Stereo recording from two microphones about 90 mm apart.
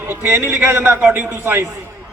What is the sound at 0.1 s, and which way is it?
A man's voice, 30° right (ahead or behind).